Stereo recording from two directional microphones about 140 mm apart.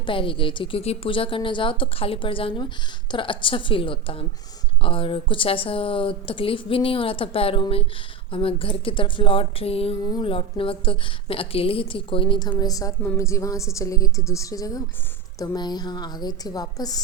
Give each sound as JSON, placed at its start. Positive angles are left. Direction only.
{"t": 0.0, "sound": "a woman's voice", "side_deg": 40}